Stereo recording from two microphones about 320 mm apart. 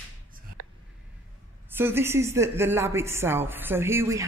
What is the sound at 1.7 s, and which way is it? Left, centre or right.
Speech, centre.